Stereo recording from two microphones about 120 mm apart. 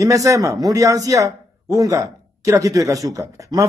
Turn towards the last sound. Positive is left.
turn(degrees=-25)  # may be behind; listen again after turning